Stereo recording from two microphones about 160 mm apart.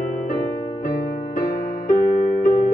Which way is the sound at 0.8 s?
55° left (ahead or behind).